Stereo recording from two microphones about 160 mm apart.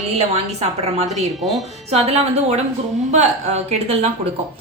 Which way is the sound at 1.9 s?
40° right (ahead or behind).